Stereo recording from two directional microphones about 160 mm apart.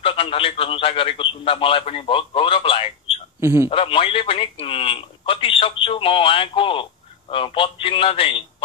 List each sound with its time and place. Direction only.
0.0 s speech: 35° left (ahead or behind)
3.3 s a man's voice: 15° right (ahead or behind)
3.7 s speech: 35° left (ahead or behind)